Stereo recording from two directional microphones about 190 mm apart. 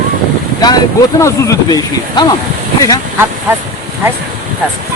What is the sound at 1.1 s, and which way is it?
Speech, 15° left (ahead or behind).